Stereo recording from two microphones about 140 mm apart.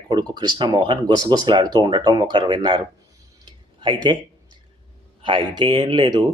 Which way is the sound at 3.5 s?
35° right (ahead or behind).